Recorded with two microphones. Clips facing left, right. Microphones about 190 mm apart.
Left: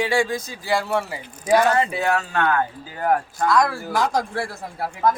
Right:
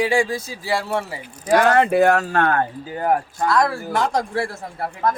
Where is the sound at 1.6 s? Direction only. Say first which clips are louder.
Right 9 dB; 65° right (ahead or behind); by 2.6 s 45° right (ahead or behind).